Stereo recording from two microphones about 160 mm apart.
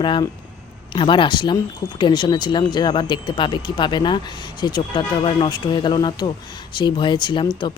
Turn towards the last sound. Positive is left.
turn(degrees=25)  # may be behind; listen again after turning